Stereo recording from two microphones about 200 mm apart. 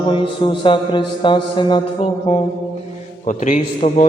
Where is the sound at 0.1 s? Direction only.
25° left (ahead or behind).